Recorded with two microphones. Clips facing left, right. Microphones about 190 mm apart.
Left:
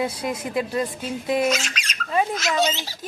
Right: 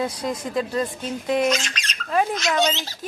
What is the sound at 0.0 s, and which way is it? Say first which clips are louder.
Speech: even; 10° left (ahead or behind).